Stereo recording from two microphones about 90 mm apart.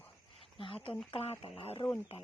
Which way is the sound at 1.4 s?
70° left (ahead or behind).